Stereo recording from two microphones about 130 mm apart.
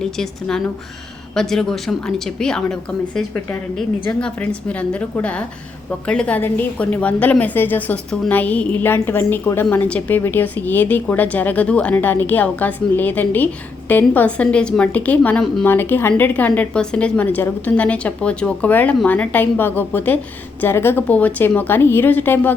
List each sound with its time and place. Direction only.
0.0 s a woman's voice: 5° left (ahead or behind)
4.2 s a woman's voice: 10° left (ahead or behind)